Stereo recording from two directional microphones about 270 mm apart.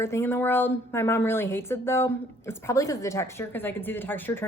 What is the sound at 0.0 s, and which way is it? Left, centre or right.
A woman's voice, centre.